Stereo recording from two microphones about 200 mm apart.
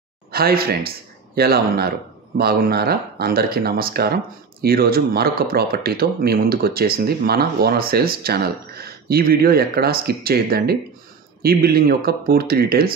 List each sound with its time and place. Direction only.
0.3 s speech: 50° right (ahead or behind)